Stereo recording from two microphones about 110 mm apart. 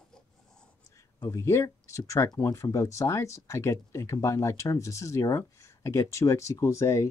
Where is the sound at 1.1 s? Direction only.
35° left (ahead or behind).